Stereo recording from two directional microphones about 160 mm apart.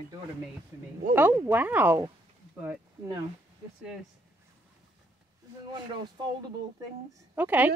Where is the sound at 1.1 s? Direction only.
10° right (ahead or behind).